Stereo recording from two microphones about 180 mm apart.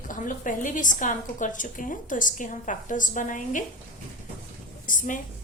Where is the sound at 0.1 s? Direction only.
45° left (ahead or behind).